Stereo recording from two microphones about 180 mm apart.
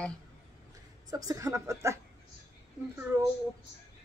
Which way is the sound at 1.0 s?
20° right (ahead or behind).